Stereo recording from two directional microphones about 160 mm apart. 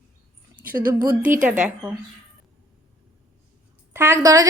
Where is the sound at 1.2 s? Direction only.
55° right (ahead or behind).